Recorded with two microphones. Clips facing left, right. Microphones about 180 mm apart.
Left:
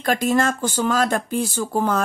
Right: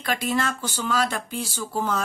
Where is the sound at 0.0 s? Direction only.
45° left (ahead or behind).